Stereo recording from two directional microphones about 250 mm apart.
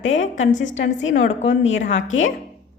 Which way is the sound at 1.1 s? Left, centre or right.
Left.